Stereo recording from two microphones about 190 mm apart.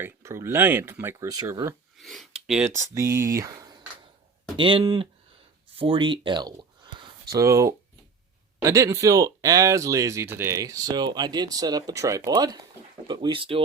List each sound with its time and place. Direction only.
0.0 s speech: 15° right (ahead or behind)
2.0 s speech: centre (ahead or behind)
2.9 s speech: 15° right (ahead or behind)